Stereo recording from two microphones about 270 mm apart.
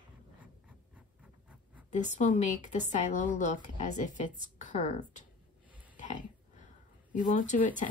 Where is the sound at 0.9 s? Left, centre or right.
Centre.